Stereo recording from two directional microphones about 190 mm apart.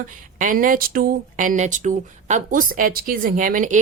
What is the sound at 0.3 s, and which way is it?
Speech, 45° right (ahead or behind).